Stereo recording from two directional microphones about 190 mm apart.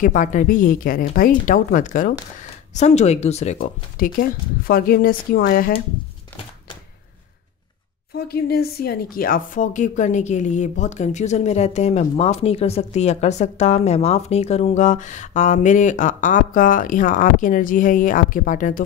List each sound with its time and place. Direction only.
0.0 s speech: 45° left (ahead or behind)
8.3 s a woman's voice: 55° left (ahead or behind)